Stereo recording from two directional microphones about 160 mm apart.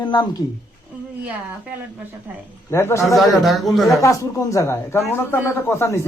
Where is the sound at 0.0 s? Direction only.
25° left (ahead or behind).